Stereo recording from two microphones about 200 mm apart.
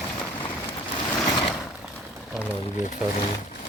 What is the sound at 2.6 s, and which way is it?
Speech, 35° left (ahead or behind).